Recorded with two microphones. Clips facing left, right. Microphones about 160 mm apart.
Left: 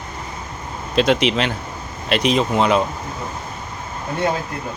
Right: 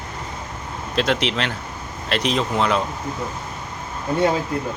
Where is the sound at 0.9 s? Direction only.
15° left (ahead or behind).